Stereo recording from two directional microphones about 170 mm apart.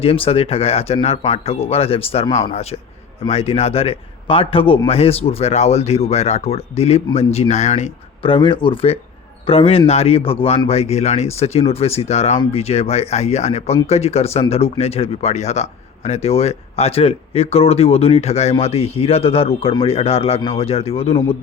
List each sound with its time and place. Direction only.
0.0 s speech: 35° left (ahead or behind)